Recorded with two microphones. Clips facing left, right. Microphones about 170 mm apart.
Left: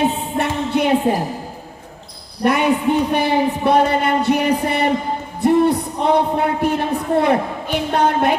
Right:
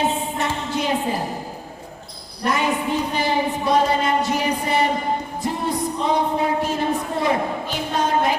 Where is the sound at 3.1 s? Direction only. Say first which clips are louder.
Left 5 dB; 60° left (ahead or behind).